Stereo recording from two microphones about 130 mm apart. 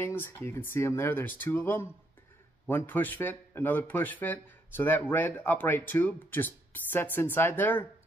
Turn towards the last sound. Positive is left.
turn(degrees=15)  # may be behind; listen again after turning